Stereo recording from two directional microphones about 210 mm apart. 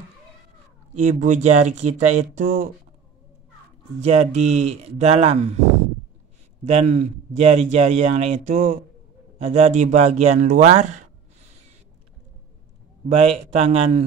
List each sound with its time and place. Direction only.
0.9 s a man's voice: 35° right (ahead or behind)
4.0 s a man's voice: 30° right (ahead or behind)
6.6 s a man's voice: 30° right (ahead or behind)
13.1 s speech: 30° right (ahead or behind)